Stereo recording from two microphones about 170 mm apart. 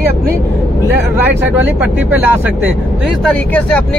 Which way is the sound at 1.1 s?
10° right (ahead or behind).